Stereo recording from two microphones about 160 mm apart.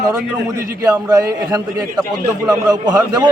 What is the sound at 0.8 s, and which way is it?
A man's voice, 20° right (ahead or behind).